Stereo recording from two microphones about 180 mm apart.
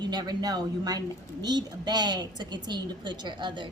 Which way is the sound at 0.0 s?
25° right (ahead or behind).